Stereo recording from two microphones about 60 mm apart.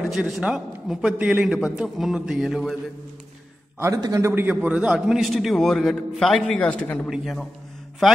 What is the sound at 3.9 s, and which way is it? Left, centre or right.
Speech, right.